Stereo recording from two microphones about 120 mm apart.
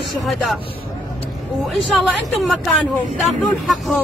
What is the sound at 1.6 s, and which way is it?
Speech, centre (ahead or behind).